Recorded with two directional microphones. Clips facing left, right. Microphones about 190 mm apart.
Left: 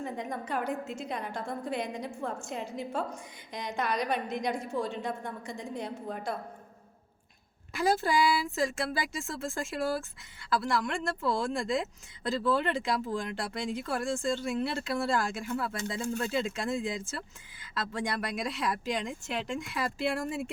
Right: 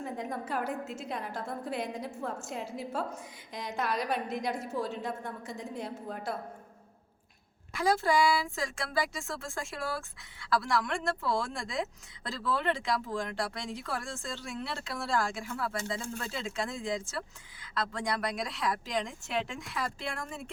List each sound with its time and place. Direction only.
0.0 s a woman's voice: 5° right (ahead or behind)
7.7 s a woman's voice: 5° left (ahead or behind)